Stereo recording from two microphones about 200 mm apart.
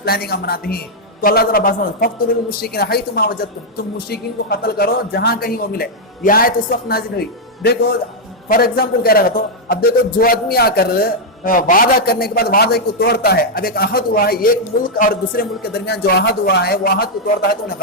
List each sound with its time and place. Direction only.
0.0 s a man's voice: 50° left (ahead or behind)